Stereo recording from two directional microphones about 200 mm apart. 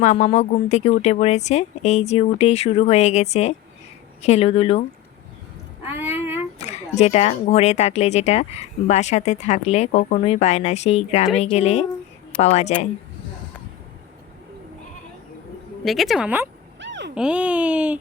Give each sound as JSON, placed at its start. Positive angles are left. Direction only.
{"t": 0.0, "sound": "speech", "side_deg": 35}
{"t": 5.8, "sound": "a sound", "side_deg": -10}
{"t": 6.6, "sound": "speech", "side_deg": 35}
{"t": 15.8, "sound": "speech", "side_deg": 0}
{"t": 16.8, "sound": "a sound", "side_deg": -65}
{"t": 17.2, "sound": "speech", "side_deg": -5}